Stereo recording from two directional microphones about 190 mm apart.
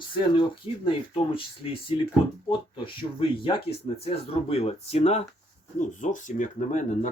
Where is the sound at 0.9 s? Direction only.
25° left (ahead or behind).